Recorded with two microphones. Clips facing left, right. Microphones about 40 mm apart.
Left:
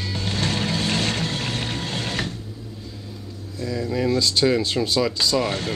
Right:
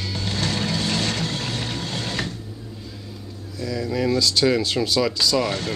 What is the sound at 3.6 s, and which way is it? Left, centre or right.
Speech, centre.